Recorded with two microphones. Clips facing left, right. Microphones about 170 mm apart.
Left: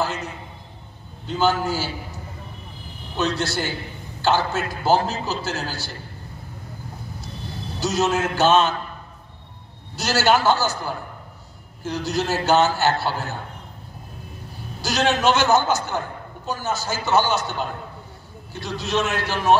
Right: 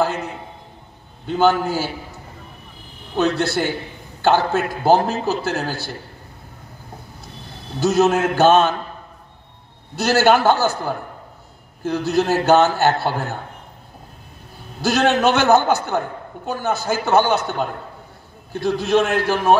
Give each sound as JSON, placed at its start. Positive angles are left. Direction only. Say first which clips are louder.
{"t": 0.0, "sound": "a sound", "louder": "right 5 dB", "side_deg": -60}
{"t": 1.2, "sound": "a man's voice", "louder": "right 4 dB", "side_deg": -55}
{"t": 3.2, "sound": "a man's voice", "louder": "right 5 dB", "side_deg": -55}
{"t": 7.8, "sound": "a man's voice", "louder": "right 6 dB", "side_deg": -55}
{"t": 9.9, "sound": "a man's voice", "louder": "right 4 dB", "side_deg": -55}
{"t": 14.8, "sound": "a man's voice", "louder": "right 5 dB", "side_deg": -55}